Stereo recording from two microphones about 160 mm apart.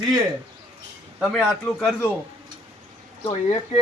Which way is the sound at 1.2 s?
5° left (ahead or behind).